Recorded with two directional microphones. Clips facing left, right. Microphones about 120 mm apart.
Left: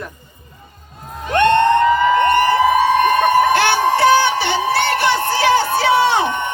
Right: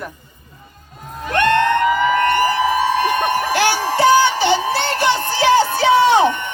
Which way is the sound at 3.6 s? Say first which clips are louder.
Left 2 dB; 20° right (ahead or behind).